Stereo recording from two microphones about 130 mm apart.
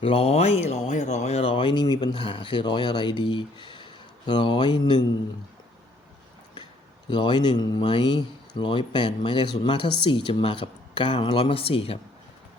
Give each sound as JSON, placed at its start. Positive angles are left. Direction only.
{"t": 0.0, "sound": "speech", "side_deg": 50}
{"t": 7.1, "sound": "speech", "side_deg": 35}